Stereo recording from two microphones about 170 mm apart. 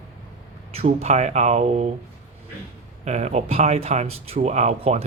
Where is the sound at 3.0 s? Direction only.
40° right (ahead or behind).